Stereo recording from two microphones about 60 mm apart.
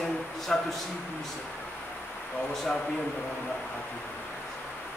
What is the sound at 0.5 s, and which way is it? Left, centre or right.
Speech, centre.